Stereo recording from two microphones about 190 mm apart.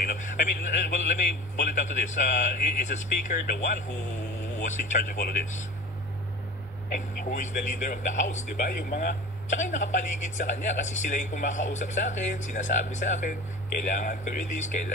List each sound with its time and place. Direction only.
0.0 s speech: 45° left (ahead or behind)
7.2 s speech: 40° left (ahead or behind)